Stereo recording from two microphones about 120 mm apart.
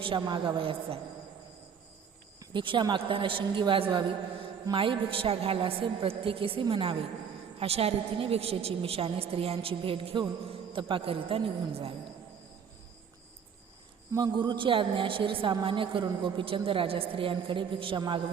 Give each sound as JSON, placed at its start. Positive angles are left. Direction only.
{"t": 0.0, "sound": "a woman's voice", "side_deg": -40}
{"t": 2.4, "sound": "a woman's voice", "side_deg": -40}
{"t": 14.2, "sound": "a woman's voice", "side_deg": -35}